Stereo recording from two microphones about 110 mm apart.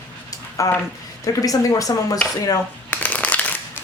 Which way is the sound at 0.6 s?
30° left (ahead or behind).